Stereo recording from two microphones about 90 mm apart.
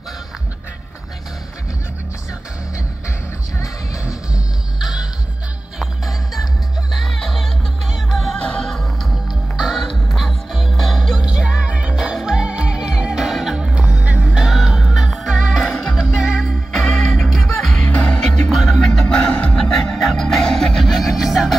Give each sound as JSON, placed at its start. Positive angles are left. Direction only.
{"t": 3.5, "sound": "music", "side_deg": 35}
{"t": 4.7, "sound": "music", "side_deg": -5}
{"t": 16.8, "sound": "music", "side_deg": 5}
{"t": 17.8, "sound": "music", "side_deg": 15}